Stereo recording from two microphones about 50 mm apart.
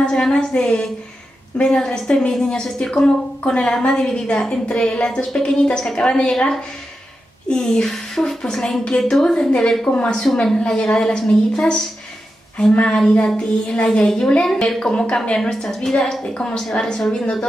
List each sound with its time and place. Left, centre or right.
0.0 s a woman's voice: centre